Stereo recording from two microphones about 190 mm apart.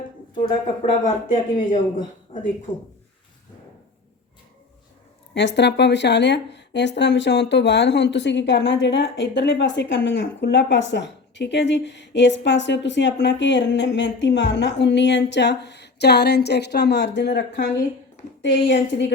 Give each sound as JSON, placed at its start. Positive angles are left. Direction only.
{"t": 0.3, "sound": "speech", "side_deg": 35}
{"t": 5.3, "sound": "speech", "side_deg": 65}